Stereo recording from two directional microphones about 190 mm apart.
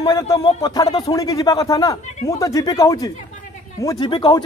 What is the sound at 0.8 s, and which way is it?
Speech, 30° left (ahead or behind).